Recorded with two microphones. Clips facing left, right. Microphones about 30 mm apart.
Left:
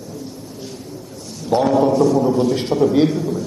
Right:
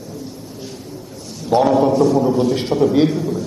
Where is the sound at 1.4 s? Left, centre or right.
Centre.